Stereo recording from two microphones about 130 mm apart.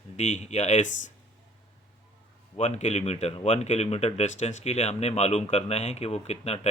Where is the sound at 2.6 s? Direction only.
60° left (ahead or behind).